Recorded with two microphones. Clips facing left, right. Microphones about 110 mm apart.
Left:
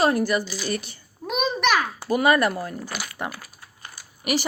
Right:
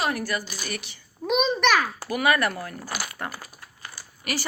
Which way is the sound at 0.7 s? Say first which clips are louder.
Left 6 dB; 40° left (ahead or behind).